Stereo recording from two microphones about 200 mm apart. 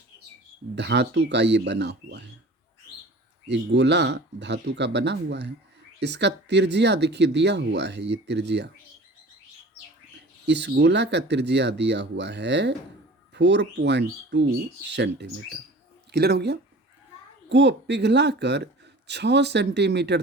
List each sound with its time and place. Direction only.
0.8 s speech: 60° right (ahead or behind)
3.5 s speech: 60° right (ahead or behind)
10.4 s speech: 60° right (ahead or behind)